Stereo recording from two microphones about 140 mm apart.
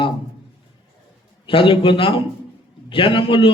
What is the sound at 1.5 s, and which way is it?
A man's voice, 40° left (ahead or behind).